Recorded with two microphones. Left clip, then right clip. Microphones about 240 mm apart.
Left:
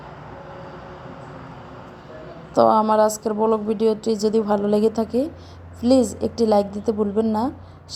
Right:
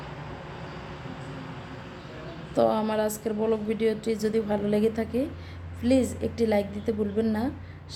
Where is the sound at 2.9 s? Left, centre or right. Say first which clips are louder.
Left 10 dB; centre.